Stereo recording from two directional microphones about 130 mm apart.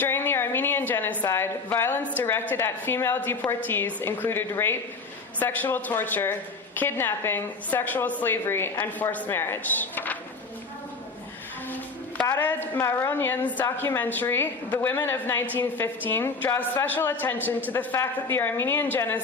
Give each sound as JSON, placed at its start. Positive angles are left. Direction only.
{"t": 0.0, "sound": "a woman's voice", "side_deg": 15}
{"t": 11.7, "sound": "a sound", "side_deg": 10}
{"t": 12.4, "sound": "a woman's voice", "side_deg": 15}